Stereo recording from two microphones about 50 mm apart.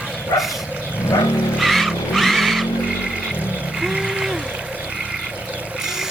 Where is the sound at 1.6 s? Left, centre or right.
Centre.